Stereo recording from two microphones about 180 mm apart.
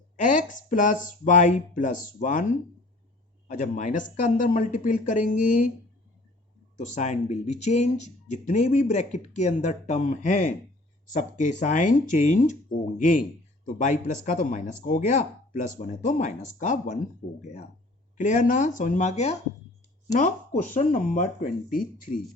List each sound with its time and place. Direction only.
0.2 s speech: 45° left (ahead or behind)
6.7 s speech: 40° left (ahead or behind)
18.2 s speech: 45° left (ahead or behind)
20.7 s speech: 45° left (ahead or behind)